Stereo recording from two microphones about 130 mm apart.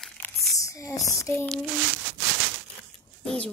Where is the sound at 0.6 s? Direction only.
25° left (ahead or behind).